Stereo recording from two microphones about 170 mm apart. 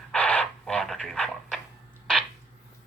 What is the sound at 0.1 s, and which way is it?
Radio, 5° left (ahead or behind).